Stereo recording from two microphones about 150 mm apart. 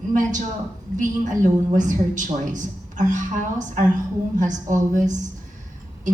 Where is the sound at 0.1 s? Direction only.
55° right (ahead or behind).